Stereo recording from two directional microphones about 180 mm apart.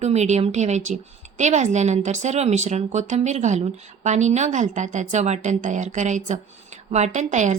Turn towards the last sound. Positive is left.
turn(degrees=-40)  # may be behind; listen again after turning